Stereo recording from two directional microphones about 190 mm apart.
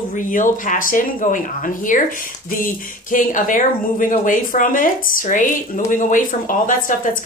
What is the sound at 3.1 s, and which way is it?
Speech, 45° left (ahead or behind).